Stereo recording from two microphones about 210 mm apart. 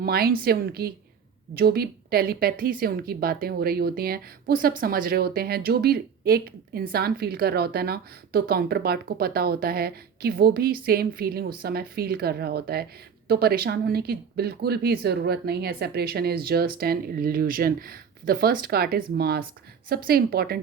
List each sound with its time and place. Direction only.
0.0 s a woman's voice: 45° right (ahead or behind)